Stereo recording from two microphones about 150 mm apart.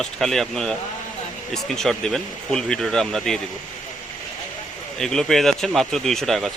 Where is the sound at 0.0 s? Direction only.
Centre (ahead or behind).